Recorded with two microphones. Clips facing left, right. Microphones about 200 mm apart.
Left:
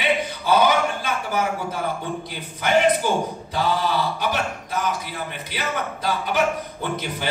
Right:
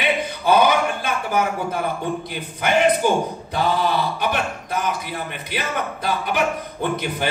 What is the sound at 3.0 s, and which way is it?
Speech, 50° right (ahead or behind).